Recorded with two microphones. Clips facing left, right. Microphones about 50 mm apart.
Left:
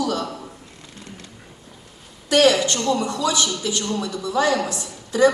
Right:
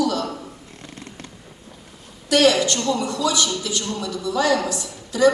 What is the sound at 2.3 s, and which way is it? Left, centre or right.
A woman's voice, left.